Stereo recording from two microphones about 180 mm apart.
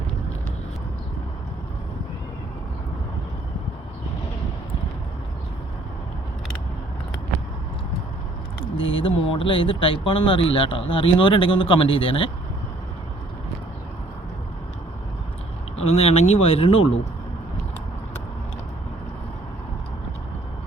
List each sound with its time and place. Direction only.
8.6 s a sound: 30° left (ahead or behind)
9.3 s speech: 30° left (ahead or behind)
15.8 s speech: 35° left (ahead or behind)